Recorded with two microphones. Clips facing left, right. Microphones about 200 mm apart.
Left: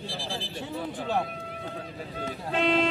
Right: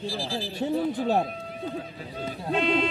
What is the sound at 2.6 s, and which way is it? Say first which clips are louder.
Speech: even; 85° left.